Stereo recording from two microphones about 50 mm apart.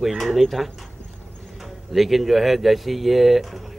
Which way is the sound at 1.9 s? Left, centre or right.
Centre.